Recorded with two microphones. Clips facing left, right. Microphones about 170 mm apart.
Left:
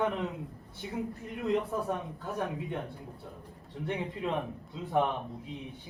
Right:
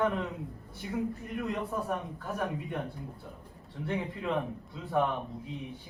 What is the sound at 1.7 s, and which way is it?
A man's voice, 20° left (ahead or behind).